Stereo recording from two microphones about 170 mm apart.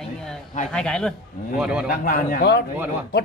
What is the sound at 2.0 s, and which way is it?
Speech, 55° left (ahead or behind).